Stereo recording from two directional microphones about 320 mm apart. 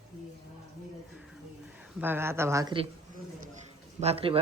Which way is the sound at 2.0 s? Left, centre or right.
Centre.